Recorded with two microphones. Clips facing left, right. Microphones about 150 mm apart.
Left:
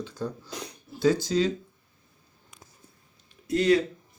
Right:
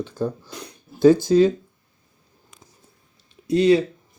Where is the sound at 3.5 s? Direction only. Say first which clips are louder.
Right 5 dB; 25° right (ahead or behind).